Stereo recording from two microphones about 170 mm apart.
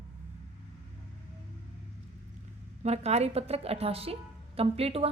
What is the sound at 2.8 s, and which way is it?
A woman's voice, 40° right (ahead or behind).